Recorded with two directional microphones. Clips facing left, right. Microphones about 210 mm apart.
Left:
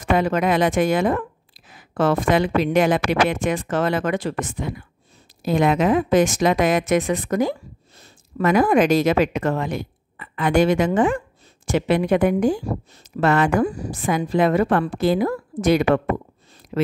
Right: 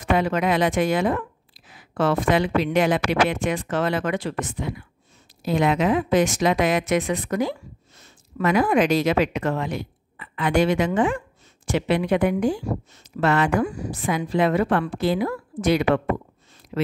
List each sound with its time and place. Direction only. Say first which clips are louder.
0.0 s speech: left 2 dB; 45° left (ahead or behind)